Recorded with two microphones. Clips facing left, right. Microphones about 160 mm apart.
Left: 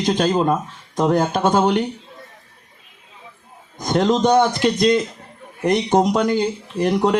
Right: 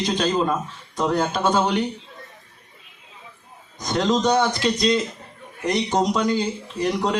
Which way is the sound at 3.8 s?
50° left (ahead or behind).